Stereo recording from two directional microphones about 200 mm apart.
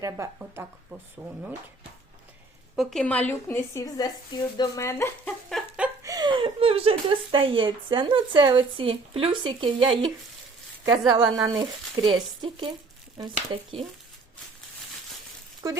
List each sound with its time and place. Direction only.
0.0 s speech: 15° right (ahead or behind)
2.7 s speech: 5° left (ahead or behind)
5.5 s a sound: centre (ahead or behind)
6.1 s speech: 20° right (ahead or behind)
11.3 s speech: 20° right (ahead or behind)
15.6 s speech: 15° right (ahead or behind)